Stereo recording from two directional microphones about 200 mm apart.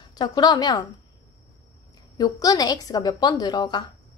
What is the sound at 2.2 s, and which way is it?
A woman's voice, 20° left (ahead or behind).